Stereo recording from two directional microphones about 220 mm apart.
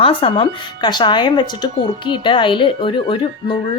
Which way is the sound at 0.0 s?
25° left (ahead or behind).